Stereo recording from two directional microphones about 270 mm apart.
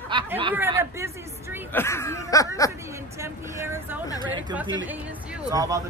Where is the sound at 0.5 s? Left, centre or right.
Centre.